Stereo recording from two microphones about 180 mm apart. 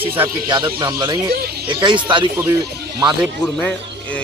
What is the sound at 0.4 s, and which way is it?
Speech, 25° right (ahead or behind).